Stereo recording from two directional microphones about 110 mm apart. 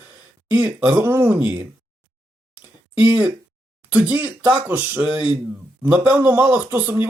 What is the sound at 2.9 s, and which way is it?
Speech, 10° right (ahead or behind).